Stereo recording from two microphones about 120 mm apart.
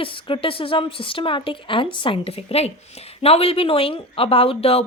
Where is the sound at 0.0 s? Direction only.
45° left (ahead or behind).